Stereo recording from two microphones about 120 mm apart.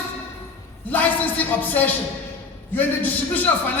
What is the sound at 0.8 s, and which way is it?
A man's voice, 15° left (ahead or behind).